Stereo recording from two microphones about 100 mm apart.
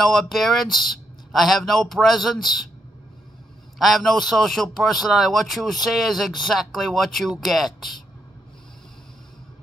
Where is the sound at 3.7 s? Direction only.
Centre (ahead or behind).